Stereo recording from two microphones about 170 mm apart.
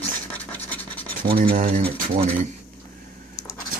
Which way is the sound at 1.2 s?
65° right (ahead or behind).